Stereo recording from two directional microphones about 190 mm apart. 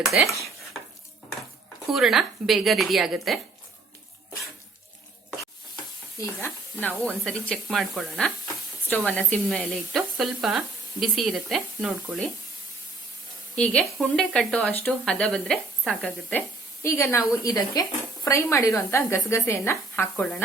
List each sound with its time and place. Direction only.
0.0 s speech: centre (ahead or behind)
1.9 s speech: centre (ahead or behind)
6.4 s speech: 10° left (ahead or behind)
13.6 s speech: 5° left (ahead or behind)
16.8 s a woman's voice: 15° left (ahead or behind)